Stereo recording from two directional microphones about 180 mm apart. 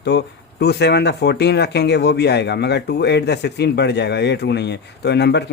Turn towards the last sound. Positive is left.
turn(degrees=70)  # may be behind; listen again after turning